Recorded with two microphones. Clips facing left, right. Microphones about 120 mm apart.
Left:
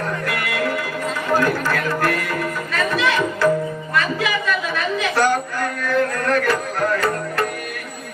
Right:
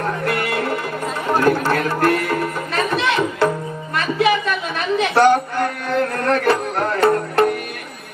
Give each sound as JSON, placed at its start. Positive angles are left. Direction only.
{"t": 0.3, "sound": "music", "side_deg": -30}